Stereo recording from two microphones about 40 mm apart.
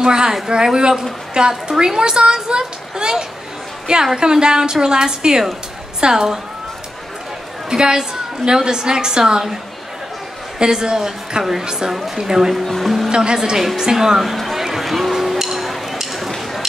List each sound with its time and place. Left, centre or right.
0.0 s a woman's voice: centre
7.7 s a woman's voice: centre
10.6 s a woman's voice: centre
12.6 s speech: centre
13.1 s a woman's voice: right; by 14.6 s centre
14.6 s music: centre
15.4 s a sound: centre